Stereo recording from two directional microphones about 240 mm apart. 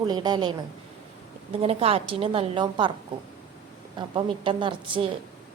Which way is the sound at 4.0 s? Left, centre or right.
Centre.